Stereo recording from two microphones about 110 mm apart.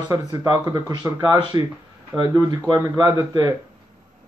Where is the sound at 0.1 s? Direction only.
35° right (ahead or behind).